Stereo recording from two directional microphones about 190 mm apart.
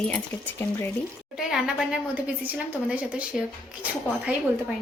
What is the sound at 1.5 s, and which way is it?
A woman's voice, centre (ahead or behind).